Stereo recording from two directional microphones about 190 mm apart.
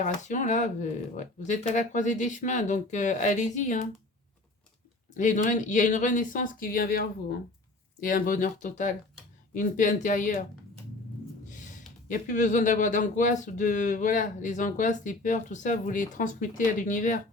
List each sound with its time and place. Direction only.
0.0 s speech: 40° left (ahead or behind)
5.1 s speech: 40° left (ahead or behind)
11.4 s a sound: 40° left (ahead or behind)
12.0 s speech: 45° left (ahead or behind)